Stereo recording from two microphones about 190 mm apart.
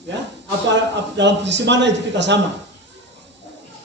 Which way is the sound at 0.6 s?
70° right (ahead or behind).